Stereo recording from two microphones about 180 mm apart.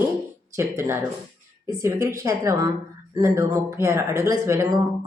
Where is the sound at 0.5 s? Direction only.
15° right (ahead or behind).